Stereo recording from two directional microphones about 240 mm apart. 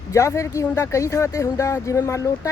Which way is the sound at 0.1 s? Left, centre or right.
Centre.